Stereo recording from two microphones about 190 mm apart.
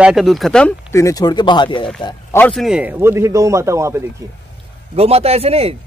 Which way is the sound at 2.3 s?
5° left (ahead or behind).